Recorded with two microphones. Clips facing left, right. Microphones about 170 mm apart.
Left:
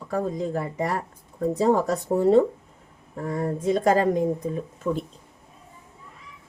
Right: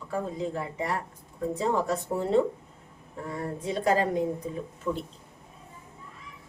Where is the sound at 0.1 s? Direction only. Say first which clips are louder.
Left 5 dB; 40° left (ahead or behind).